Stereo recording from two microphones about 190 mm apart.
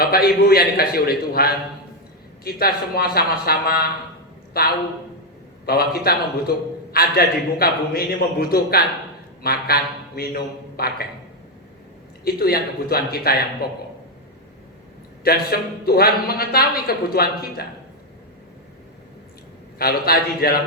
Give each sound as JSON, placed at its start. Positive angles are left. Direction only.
{"t": 0.0, "sound": "a man's voice", "side_deg": 50}
{"t": 12.2, "sound": "a man's voice", "side_deg": 55}
{"t": 15.2, "sound": "a man's voice", "side_deg": 55}
{"t": 19.8, "sound": "a man's voice", "side_deg": 55}